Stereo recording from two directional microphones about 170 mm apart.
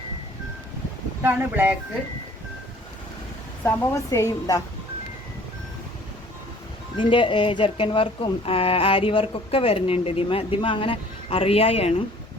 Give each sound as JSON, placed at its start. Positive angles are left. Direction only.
{"t": 1.2, "sound": "speech", "side_deg": -10}
{"t": 3.6, "sound": "a woman's voice", "side_deg": 15}
{"t": 6.9, "sound": "speech", "side_deg": 30}